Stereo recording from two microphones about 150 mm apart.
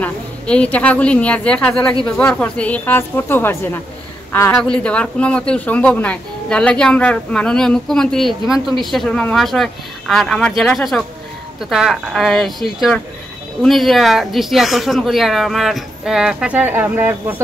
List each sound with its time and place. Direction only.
0.0 s a woman's voice: 10° left (ahead or behind)
4.6 s speech: 5° left (ahead or behind); by 17.4 s 15° right (ahead or behind)